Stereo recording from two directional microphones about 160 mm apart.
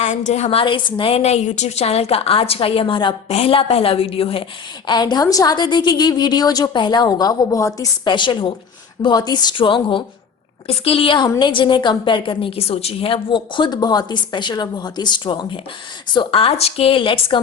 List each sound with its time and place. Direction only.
0.0 s a woman's voice: 50° left (ahead or behind)
0.6 s a woman's voice: 30° left (ahead or behind)